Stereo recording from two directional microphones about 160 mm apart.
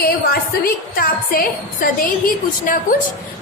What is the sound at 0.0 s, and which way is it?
A woman's voice, 70° left (ahead or behind).